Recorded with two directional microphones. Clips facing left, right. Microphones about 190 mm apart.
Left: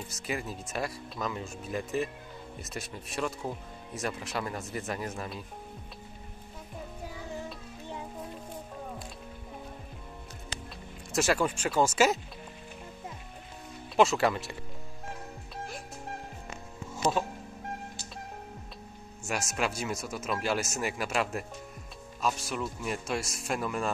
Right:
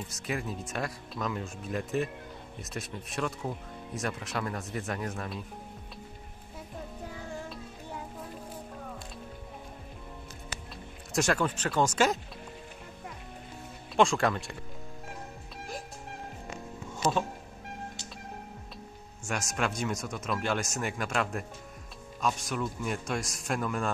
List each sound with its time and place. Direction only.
0.1 s speech: centre (ahead or behind)
11.1 s speech: 5° left (ahead or behind)
13.9 s speech: 5° left (ahead or behind)
19.2 s speech: 5° left (ahead or behind)